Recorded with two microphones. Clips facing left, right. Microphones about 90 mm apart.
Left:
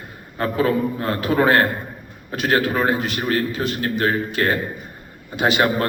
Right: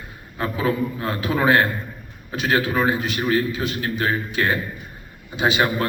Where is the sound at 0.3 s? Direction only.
45° left (ahead or behind).